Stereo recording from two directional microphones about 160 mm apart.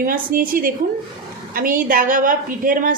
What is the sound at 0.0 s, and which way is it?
A woman's voice, 65° right (ahead or behind).